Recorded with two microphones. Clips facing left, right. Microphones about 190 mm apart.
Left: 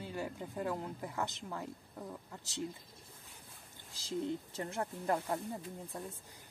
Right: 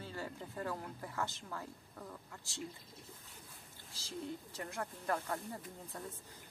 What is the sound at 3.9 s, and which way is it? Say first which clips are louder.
Speech: left 7 dB; 20° left (ahead or behind).